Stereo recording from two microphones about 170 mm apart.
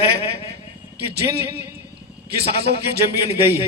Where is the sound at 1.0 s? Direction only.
70° right (ahead or behind).